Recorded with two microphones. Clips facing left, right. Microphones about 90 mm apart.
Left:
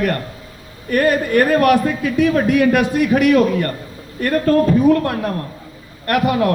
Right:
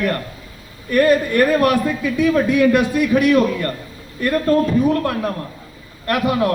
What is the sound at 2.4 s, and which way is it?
Speech, 75° left (ahead or behind).